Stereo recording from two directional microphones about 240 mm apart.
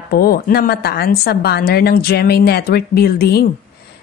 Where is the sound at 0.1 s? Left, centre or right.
Left.